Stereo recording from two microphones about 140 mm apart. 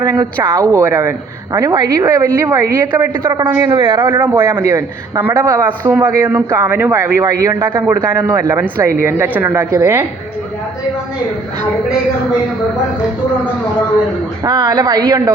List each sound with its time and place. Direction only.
0.4 s a man's voice: 20° right (ahead or behind)
3.2 s a man's voice: 35° right (ahead or behind)
4.2 s a man's voice: 15° right (ahead or behind)
14.4 s speech: 30° right (ahead or behind)